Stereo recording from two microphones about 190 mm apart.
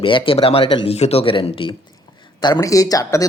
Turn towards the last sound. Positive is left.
turn(degrees=15)  # may be behind; listen again after turning